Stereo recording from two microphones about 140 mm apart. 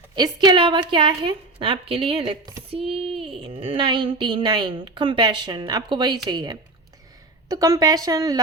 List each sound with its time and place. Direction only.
0.2 s a woman's voice: 30° right (ahead or behind)
2.9 s a sound: 45° right (ahead or behind)
3.4 s a woman's voice: 40° right (ahead or behind); by 8.4 s 25° right (ahead or behind)